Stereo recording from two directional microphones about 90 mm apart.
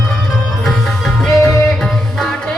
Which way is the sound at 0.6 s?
5° left (ahead or behind).